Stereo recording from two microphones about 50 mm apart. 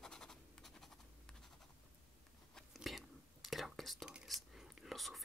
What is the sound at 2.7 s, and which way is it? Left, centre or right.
Whispering, centre.